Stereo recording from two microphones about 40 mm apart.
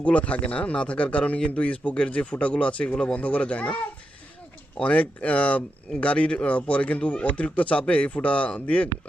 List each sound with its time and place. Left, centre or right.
0.0 s speech: left
3.2 s speech: left